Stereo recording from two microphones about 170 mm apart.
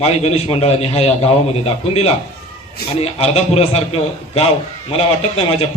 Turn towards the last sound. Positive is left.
turn(degrees=35)  # may be behind; listen again after turning